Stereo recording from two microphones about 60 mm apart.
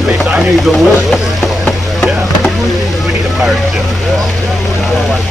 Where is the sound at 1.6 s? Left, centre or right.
Centre.